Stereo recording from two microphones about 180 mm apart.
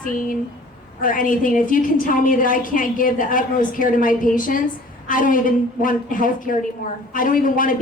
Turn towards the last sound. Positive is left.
turn(degrees=50)  # may be behind; listen again after turning